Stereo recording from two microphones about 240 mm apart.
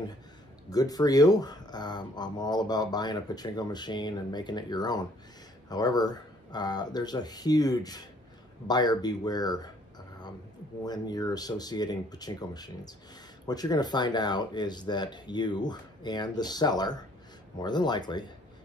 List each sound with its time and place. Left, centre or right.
0.7 s speech: centre